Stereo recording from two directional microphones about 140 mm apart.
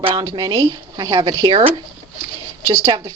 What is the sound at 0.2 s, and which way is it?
A woman's voice, 30° right (ahead or behind).